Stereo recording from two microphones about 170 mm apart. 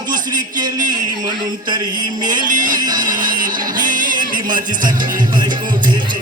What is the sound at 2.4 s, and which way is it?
Music, 50° right (ahead or behind).